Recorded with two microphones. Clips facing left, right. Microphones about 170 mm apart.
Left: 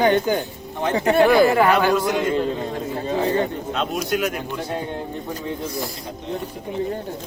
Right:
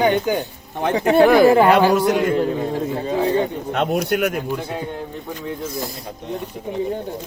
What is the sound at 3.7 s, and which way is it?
Speech, 60° right (ahead or behind).